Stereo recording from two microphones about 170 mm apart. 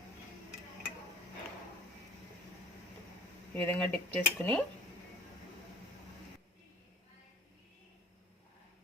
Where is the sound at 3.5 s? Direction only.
10° left (ahead or behind).